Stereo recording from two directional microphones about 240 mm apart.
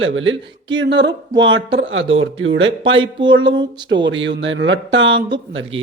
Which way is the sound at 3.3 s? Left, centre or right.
Right.